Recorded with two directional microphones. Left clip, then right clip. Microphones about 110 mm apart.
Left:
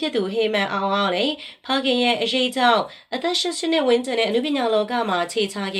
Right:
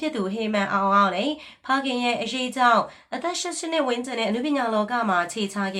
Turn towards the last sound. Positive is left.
turn(degrees=20)  # may be behind; listen again after turning